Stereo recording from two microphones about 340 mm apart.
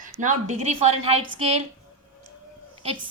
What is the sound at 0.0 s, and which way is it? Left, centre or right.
A woman's voice, right.